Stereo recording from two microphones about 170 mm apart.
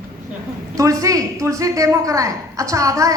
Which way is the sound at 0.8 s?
20° right (ahead or behind).